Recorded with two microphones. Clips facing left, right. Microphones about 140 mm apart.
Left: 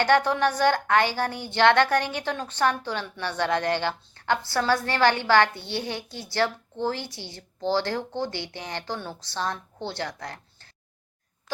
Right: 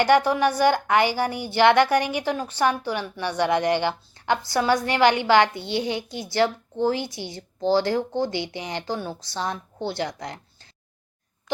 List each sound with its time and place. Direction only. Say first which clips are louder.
0.0 s a woman's voice: right 3 dB; 10° right (ahead or behind)